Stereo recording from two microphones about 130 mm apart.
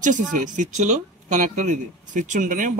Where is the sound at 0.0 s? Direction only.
75° right (ahead or behind).